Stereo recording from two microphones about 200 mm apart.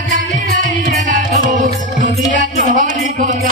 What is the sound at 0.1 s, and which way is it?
Music, 40° right (ahead or behind).